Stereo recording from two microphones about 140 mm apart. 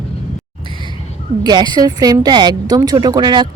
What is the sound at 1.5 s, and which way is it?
A woman's voice, 30° right (ahead or behind).